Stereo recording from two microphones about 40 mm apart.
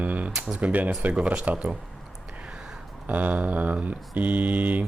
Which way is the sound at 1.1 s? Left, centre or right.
Right.